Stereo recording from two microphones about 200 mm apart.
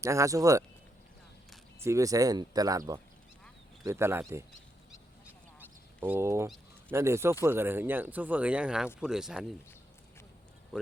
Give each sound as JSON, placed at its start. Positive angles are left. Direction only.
{"t": 0.0, "sound": "speech", "side_deg": -15}
{"t": 1.8, "sound": "speech", "side_deg": -15}
{"t": 5.5, "sound": "fowl", "side_deg": -10}
{"t": 6.9, "sound": "speech", "side_deg": -15}